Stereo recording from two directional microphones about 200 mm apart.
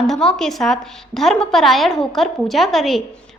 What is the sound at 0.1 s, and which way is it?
A woman's voice, 5° left (ahead or behind).